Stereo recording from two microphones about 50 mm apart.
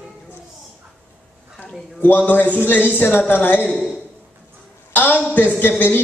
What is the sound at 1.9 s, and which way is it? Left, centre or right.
A man's voice, left.